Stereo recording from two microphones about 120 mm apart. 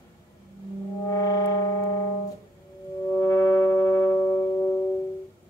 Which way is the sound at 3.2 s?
25° left (ahead or behind).